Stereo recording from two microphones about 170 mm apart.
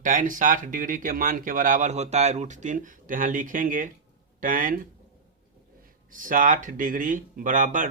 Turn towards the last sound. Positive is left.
turn(degrees=-50)  # may be behind; listen again after turning